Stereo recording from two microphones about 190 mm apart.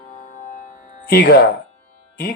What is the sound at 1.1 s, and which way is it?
Speech, 60° left (ahead or behind).